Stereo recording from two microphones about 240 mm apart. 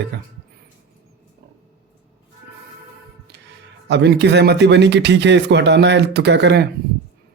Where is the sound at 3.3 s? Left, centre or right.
Right.